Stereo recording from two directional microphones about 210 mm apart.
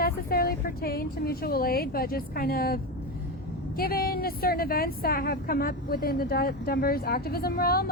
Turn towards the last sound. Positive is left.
turn(degrees=45)  # may be behind; listen again after turning